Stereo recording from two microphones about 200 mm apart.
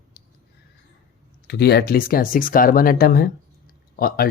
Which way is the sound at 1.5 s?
55° left (ahead or behind).